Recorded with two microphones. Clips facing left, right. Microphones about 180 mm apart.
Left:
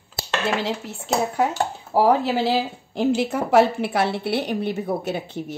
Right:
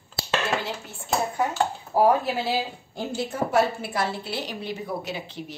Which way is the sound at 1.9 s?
85° left.